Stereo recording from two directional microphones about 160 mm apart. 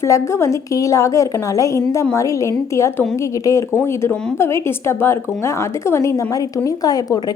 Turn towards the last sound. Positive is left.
turn(degrees=25)  # may be behind; listen again after turning